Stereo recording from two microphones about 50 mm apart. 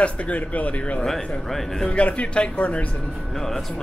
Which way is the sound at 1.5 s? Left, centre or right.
Centre.